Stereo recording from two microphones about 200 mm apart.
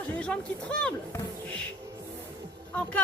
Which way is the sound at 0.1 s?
5° left (ahead or behind).